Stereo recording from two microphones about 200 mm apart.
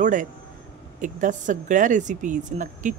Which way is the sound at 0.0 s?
40° right (ahead or behind).